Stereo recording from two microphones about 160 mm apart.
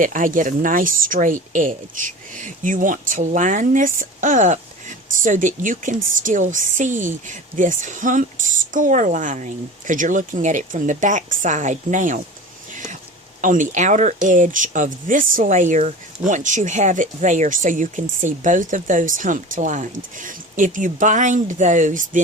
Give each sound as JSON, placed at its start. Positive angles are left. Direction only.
{"t": 0.0, "sound": "speech", "side_deg": -55}
{"t": 12.7, "sound": "a sound", "side_deg": -50}
{"t": 13.4, "sound": "speech", "side_deg": -55}